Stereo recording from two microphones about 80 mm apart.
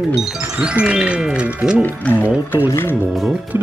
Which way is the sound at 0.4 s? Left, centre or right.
Centre.